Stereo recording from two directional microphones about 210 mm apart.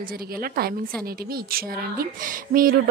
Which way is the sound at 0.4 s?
45° right (ahead or behind).